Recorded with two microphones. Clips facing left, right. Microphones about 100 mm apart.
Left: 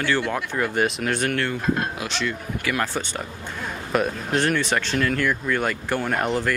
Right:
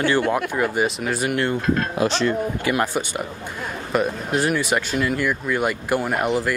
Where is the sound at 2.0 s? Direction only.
35° right (ahead or behind).